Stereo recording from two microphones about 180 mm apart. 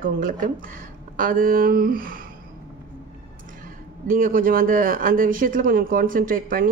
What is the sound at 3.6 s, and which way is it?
Speech, 50° right (ahead or behind).